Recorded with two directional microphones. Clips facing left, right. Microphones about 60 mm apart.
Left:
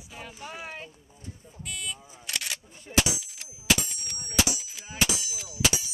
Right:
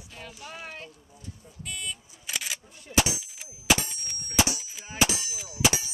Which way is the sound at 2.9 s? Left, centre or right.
Centre.